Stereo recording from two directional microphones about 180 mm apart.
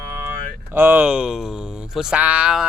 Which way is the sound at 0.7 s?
10° right (ahead or behind).